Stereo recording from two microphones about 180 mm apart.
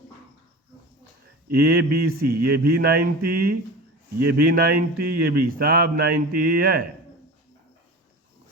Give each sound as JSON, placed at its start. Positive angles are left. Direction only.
{"t": 1.5, "sound": "speech", "side_deg": -60}